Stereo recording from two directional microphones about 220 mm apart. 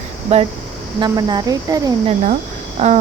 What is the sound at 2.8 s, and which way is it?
Speech, 30° right (ahead or behind).